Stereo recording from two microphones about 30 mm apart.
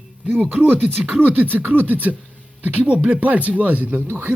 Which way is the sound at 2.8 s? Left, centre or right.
Right.